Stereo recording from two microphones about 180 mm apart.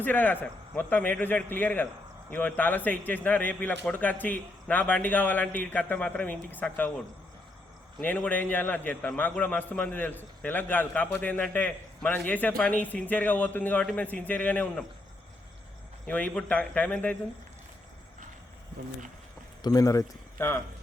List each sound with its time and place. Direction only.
0.0 s a man's voice: 10° left (ahead or behind)
7.9 s a man's voice: 10° left (ahead or behind)
16.0 s a man's voice: 10° left (ahead or behind)
19.6 s speech: 20° left (ahead or behind)